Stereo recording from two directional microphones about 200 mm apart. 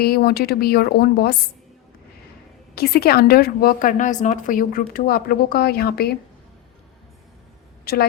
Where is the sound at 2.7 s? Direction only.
50° left (ahead or behind).